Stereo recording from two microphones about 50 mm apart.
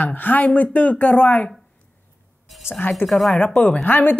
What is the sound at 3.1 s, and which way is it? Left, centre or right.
Speech, centre.